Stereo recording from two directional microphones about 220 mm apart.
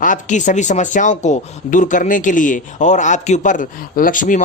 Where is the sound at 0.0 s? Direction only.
35° left (ahead or behind).